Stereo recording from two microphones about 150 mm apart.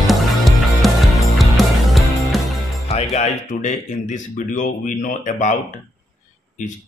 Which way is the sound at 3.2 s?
55° left (ahead or behind).